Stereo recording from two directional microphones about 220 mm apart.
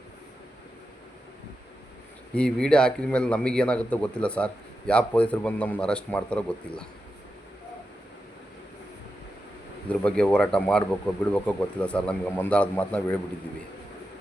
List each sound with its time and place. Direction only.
2.3 s a man's voice: 5° left (ahead or behind)
9.9 s a man's voice: 5° left (ahead or behind)